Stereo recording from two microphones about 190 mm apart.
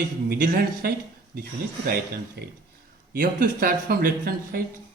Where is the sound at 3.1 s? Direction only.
50° right (ahead or behind).